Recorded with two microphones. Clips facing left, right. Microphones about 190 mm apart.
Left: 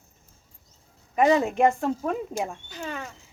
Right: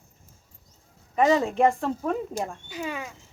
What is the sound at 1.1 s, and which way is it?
Speech, 20° left (ahead or behind).